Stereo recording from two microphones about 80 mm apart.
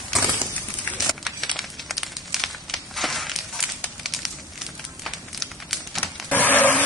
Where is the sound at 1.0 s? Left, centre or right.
Centre.